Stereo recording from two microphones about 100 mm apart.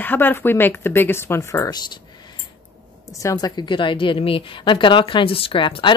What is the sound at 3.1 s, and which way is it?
A woman's voice, 35° left (ahead or behind).